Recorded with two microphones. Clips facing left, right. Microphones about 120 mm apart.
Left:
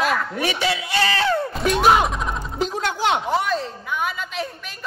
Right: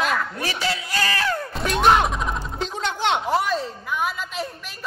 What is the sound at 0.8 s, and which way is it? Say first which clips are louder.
Speech: left 4 dB; 25° left (ahead or behind).